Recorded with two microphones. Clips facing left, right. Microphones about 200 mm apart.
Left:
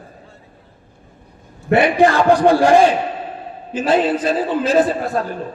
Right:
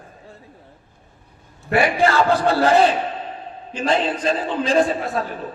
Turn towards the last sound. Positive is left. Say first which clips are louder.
# left 3 dB
turn(degrees=0)  # may be behind; listen again after turning